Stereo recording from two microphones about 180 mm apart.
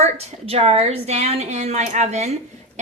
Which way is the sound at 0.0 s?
35° right (ahead or behind).